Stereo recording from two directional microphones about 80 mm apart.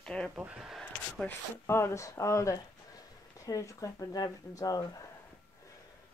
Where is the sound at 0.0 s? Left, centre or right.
Centre.